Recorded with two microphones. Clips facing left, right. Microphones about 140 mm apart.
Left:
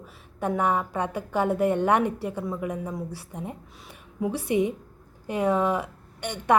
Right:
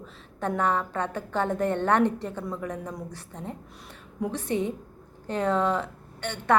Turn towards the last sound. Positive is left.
turn(degrees=15)  # may be behind; listen again after turning